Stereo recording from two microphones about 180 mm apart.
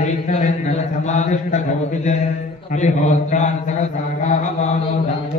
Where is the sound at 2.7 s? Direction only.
40° left (ahead or behind).